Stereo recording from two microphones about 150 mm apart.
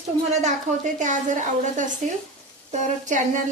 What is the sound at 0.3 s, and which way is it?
A woman's voice, 55° right (ahead or behind).